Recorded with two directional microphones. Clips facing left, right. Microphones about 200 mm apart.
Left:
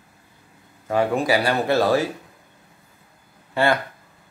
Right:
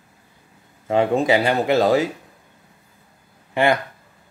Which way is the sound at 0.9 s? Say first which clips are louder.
Right 3 dB; 25° right (ahead or behind).